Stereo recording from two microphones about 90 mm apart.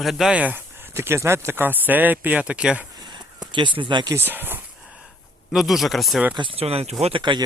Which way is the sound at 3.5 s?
65° right (ahead or behind).